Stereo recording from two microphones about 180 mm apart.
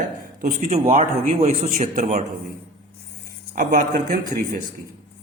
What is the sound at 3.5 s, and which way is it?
Speech, 50° right (ahead or behind).